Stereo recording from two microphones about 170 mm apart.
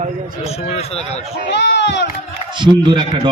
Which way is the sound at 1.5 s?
90° left.